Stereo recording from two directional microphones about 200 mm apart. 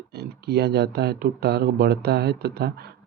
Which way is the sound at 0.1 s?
55° right (ahead or behind).